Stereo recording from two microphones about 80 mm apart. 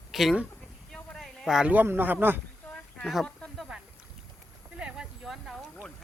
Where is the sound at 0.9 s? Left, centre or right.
Centre.